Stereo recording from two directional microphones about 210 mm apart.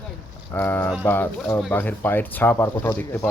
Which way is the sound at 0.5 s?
10° left (ahead or behind).